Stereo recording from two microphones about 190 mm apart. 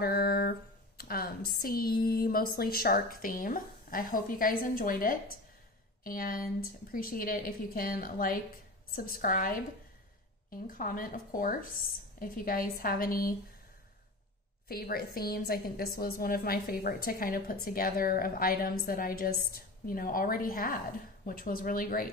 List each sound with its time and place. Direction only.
0.0 s a woman's voice: 55° left (ahead or behind)
14.7 s a woman's voice: 50° left (ahead or behind)